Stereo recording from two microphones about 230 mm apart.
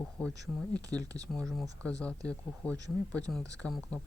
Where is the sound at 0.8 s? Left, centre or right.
Centre.